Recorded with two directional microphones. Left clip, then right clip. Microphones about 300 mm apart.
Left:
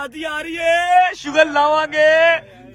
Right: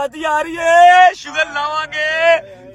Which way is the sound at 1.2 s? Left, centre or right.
Centre.